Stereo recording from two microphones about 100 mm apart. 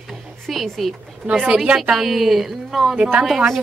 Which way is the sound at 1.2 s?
10° right (ahead or behind).